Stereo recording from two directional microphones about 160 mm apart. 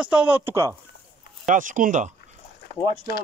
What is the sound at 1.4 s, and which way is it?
Speech, 55° right (ahead or behind).